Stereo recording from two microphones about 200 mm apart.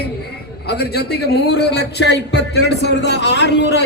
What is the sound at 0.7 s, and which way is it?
A man's voice, 55° left (ahead or behind).